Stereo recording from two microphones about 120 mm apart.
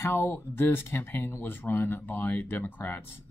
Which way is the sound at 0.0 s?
20° left (ahead or behind).